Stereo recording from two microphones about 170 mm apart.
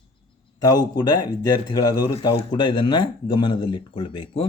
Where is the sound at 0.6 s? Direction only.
20° left (ahead or behind).